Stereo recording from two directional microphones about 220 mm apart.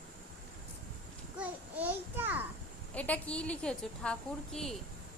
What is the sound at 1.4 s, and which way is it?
Babbling, 5° right (ahead or behind).